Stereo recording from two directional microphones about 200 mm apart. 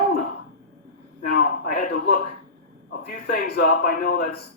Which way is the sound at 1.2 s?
45° left (ahead or behind).